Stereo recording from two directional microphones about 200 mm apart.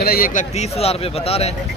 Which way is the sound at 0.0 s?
45° left (ahead or behind).